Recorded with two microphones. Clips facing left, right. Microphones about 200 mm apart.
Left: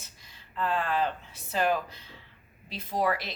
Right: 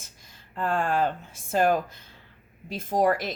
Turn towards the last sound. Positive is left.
turn(degrees=-45)  # may be behind; listen again after turning